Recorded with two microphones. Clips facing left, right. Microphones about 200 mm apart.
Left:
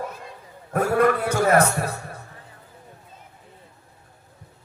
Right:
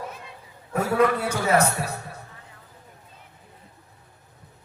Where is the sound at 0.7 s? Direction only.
50° left (ahead or behind).